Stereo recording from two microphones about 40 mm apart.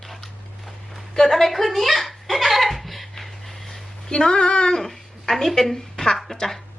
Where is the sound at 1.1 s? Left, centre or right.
Centre.